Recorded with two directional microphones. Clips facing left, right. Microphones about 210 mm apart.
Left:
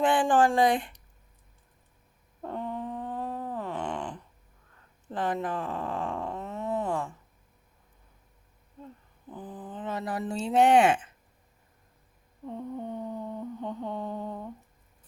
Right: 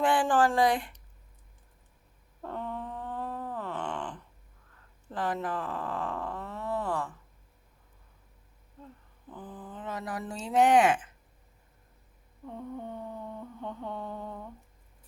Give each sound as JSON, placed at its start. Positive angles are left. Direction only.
{"t": 0.0, "sound": "speech", "side_deg": 20}
{"t": 2.4, "sound": "a sound", "side_deg": 15}
{"t": 5.1, "sound": "speech", "side_deg": 20}
{"t": 9.3, "sound": "speech", "side_deg": 15}
{"t": 12.5, "sound": "mantra", "side_deg": 20}